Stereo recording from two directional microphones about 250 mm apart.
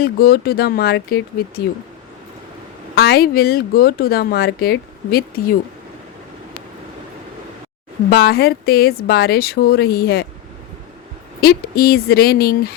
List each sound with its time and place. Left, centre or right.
0.0 s speech: left
2.9 s speech: left
8.1 s speech: left
11.3 s speech: left